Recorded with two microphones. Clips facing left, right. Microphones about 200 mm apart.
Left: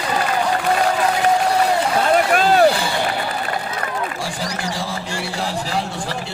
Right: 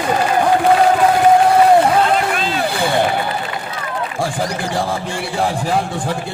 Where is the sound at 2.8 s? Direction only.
55° right (ahead or behind).